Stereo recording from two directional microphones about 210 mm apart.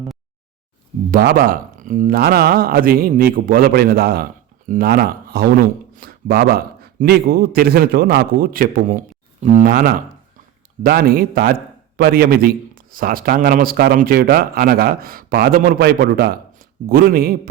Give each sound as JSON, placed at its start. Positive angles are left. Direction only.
{"t": 1.1, "sound": "speech", "side_deg": -45}